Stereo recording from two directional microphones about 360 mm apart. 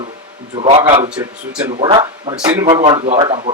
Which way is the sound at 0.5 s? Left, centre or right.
Centre.